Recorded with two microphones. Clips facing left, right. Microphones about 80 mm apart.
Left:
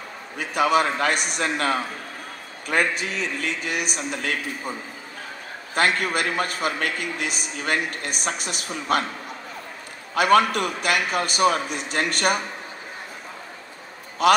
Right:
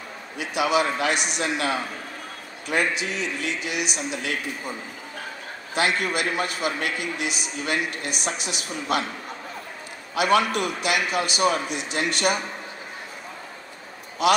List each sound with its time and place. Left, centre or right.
0.4 s a man's voice: left
5.8 s a man's voice: left
10.1 s a man's voice: left
14.2 s a man's voice: left